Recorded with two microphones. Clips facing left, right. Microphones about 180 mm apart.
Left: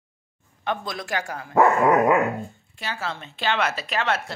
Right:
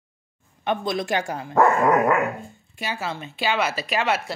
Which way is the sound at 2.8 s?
10° right (ahead or behind).